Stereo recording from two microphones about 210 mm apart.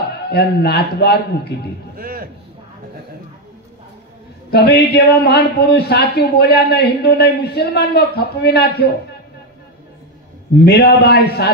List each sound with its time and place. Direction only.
0.3 s a man's voice: 50° left (ahead or behind)
2.0 s a sound: 45° right (ahead or behind)
4.5 s a man's voice: 50° left (ahead or behind)
10.6 s a man's voice: 50° left (ahead or behind)